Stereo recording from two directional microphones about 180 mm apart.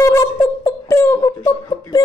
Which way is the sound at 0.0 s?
20° left (ahead or behind).